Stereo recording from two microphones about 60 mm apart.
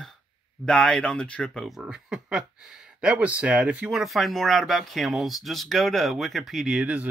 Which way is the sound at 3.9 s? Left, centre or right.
Centre.